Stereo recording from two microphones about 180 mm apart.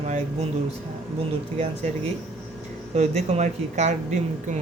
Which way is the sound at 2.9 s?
40° right (ahead or behind).